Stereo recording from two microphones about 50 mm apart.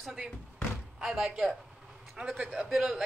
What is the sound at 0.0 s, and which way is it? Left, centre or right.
A woman's voice, centre.